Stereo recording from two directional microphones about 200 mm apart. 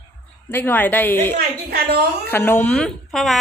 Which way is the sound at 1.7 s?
50° right (ahead or behind).